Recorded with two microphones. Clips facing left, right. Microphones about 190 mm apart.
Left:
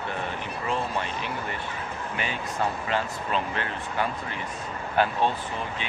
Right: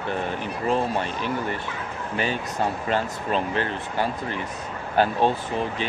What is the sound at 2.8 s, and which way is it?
Speech, 35° right (ahead or behind).